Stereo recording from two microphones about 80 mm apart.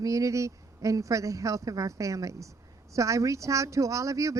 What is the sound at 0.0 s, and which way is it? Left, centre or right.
Speech, right.